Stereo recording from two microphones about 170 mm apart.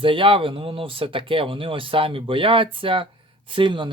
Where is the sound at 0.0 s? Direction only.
30° right (ahead or behind).